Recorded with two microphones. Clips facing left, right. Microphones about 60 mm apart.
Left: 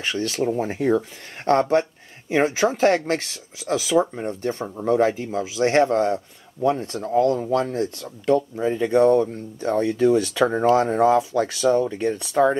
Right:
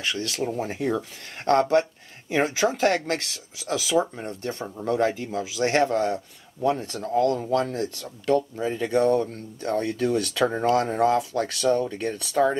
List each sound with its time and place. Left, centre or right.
0.0 s speech: left